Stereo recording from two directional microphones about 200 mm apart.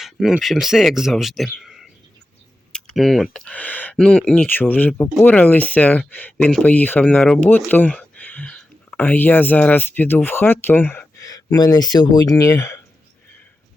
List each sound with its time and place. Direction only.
0.0 s speech: centre (ahead or behind)
2.7 s typing: centre (ahead or behind)
3.3 s speech: 5° left (ahead or behind)